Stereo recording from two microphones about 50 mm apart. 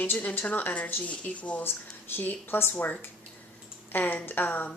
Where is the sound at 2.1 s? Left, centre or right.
Left.